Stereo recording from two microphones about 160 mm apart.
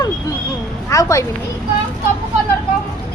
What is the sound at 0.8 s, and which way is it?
Speech, 20° left (ahead or behind).